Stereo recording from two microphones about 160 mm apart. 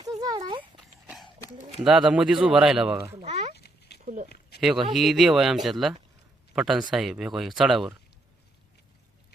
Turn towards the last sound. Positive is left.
turn(degrees=0)  # may be behind; listen again after turning